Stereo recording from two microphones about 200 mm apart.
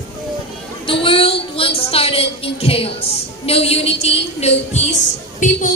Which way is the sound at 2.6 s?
30° left (ahead or behind).